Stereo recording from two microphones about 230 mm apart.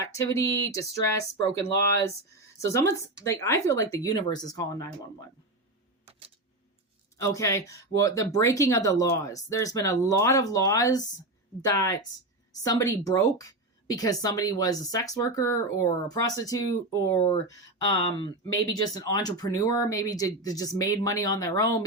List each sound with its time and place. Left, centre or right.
0.0 s speech: centre
7.2 s speech: centre